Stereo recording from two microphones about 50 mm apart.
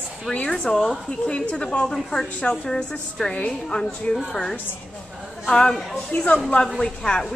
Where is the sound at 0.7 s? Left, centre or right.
Centre.